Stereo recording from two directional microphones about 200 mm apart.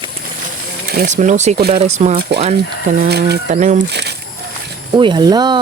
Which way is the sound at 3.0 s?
55° right (ahead or behind).